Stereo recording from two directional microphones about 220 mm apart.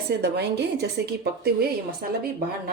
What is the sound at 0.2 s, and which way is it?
Speech, 50° right (ahead or behind).